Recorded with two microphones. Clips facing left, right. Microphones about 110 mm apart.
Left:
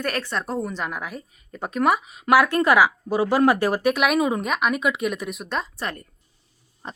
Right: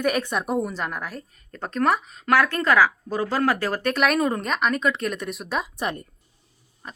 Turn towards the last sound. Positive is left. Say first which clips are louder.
# left 4 dB
turn(degrees=25)  # may be behind; listen again after turning